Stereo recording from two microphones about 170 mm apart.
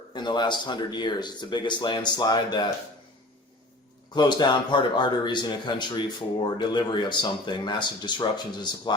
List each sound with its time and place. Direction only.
0.1 s speech: 25° left (ahead or behind)
4.1 s speech: 25° left (ahead or behind)